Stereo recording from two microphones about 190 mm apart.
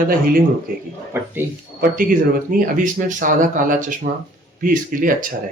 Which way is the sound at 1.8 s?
50° right (ahead or behind).